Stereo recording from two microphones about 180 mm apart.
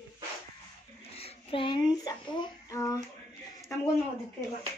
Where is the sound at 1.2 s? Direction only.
30° left (ahead or behind).